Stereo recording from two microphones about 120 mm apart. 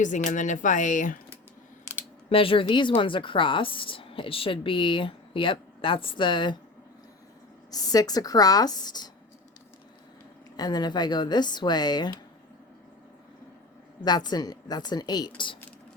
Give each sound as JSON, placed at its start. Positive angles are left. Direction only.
{"t": 0.0, "sound": "speech", "side_deg": 90}
{"t": 2.3, "sound": "a woman's voice", "side_deg": 50}
{"t": 7.7, "sound": "speech", "side_deg": 30}
{"t": 10.6, "sound": "speech", "side_deg": 35}
{"t": 14.0, "sound": "speech", "side_deg": 35}